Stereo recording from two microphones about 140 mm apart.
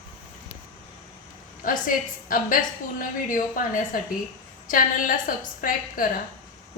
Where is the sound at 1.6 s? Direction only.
75° left (ahead or behind).